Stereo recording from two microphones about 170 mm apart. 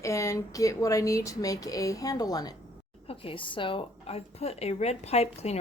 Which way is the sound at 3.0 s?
35° left (ahead or behind).